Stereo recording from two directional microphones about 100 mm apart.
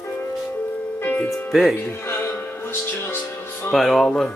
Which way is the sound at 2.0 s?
25° left (ahead or behind).